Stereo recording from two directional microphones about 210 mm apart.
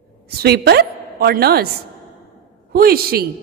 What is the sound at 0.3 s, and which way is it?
A woman's voice, 50° right (ahead or behind).